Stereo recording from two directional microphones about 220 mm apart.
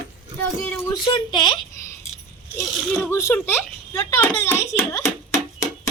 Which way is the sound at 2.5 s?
10° left (ahead or behind).